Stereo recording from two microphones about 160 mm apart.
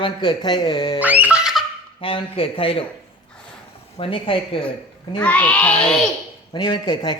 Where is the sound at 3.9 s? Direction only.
35° left (ahead or behind).